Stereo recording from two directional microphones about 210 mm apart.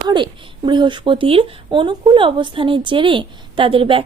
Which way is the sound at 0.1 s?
20° right (ahead or behind).